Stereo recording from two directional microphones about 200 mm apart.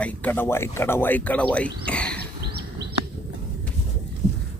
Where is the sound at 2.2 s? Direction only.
55° right (ahead or behind).